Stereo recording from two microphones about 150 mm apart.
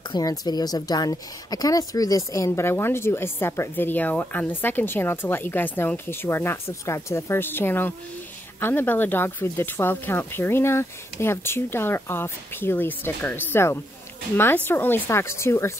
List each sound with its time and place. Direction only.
0.1 s speech: 25° left (ahead or behind)